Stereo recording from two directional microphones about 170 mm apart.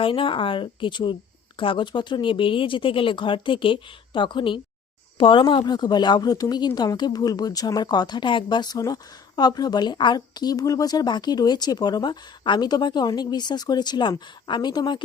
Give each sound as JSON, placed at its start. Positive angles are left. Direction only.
{"t": 0.0, "sound": "a woman's voice", "side_deg": 30}